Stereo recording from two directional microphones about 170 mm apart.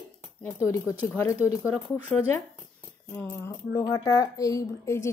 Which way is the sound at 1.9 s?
15° left (ahead or behind).